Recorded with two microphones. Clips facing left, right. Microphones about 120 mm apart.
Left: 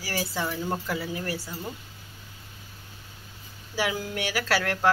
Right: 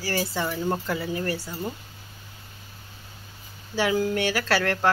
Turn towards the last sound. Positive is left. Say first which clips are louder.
# right 1 dB
turn(degrees=10)  # may be behind; listen again after turning